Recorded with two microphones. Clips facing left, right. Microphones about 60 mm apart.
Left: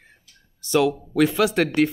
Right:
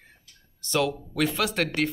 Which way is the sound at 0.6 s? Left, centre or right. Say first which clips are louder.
Left 6 dB; centre.